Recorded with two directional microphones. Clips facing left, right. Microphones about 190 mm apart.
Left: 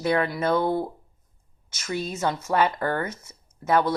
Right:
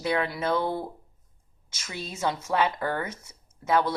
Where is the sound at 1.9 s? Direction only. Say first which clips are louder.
Left 4 dB; 45° left (ahead or behind).